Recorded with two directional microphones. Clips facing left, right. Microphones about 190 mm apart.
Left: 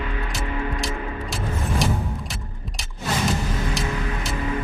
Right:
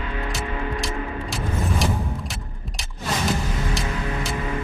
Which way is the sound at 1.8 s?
Centre (ahead or behind).